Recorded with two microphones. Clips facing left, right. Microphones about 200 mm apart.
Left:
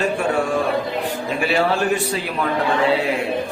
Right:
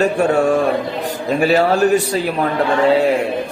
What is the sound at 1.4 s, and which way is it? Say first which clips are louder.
A man's voice: right 6 dB; 40° right (ahead or behind).